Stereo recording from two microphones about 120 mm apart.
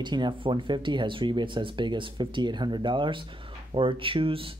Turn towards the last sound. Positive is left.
turn(degrees=-50)  # may be behind; listen again after turning